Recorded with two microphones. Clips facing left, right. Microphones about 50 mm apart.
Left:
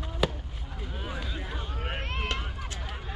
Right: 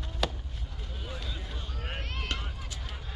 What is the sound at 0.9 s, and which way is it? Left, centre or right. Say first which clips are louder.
Run: left 4 dB; left.